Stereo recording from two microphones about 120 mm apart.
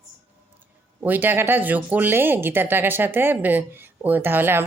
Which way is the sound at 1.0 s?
15° right (ahead or behind).